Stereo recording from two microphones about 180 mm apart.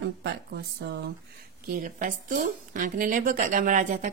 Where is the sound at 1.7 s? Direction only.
50° right (ahead or behind).